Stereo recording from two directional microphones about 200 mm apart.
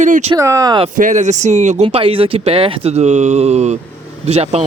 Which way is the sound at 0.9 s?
40° right (ahead or behind).